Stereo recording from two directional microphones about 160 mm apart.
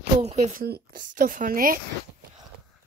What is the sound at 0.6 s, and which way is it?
A woman's voice, 70° right (ahead or behind).